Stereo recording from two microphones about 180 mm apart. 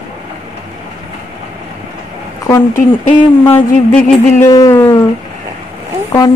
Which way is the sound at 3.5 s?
10° left (ahead or behind).